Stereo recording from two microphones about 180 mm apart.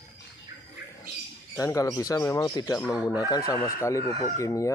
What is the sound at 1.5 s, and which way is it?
Speech, 20° left (ahead or behind).